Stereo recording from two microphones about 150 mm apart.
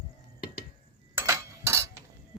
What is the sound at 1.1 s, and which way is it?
Cutlery, 20° right (ahead or behind).